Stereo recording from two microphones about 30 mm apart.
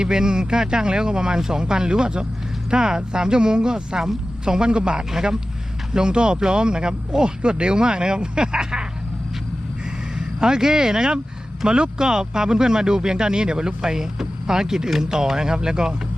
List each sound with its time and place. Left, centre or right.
0.0 s a man's voice: right
10.2 s speech: right